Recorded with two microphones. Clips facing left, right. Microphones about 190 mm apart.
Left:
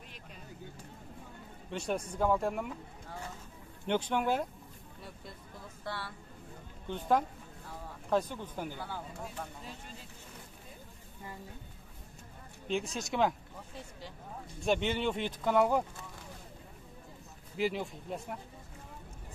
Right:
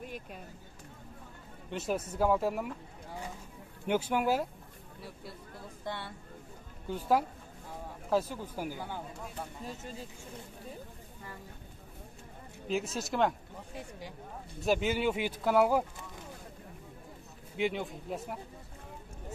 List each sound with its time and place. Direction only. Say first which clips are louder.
0.0 s vehicle: right 9 dB; 50° right (ahead or behind)
1.7 s speech: right 1 dB; centre (ahead or behind)
5.9 s speech: right 1 dB; 20° right (ahead or behind)
6.9 s speech: right 1 dB; 5° right (ahead or behind)
12.6 s speech: right 1 dB; 5° right (ahead or behind)
13.7 s speech: right 4 dB; 15° right (ahead or behind)
14.6 s speech: right 2 dB; 5° right (ahead or behind)
17.6 s speech: right 1 dB; centre (ahead or behind)